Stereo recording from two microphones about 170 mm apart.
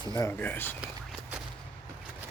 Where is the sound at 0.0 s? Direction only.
20° left (ahead or behind).